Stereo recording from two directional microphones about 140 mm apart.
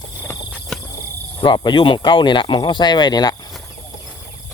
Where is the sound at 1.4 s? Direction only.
35° left (ahead or behind).